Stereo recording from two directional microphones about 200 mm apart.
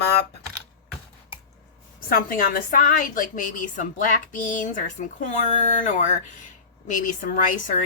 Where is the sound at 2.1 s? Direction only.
45° left (ahead or behind).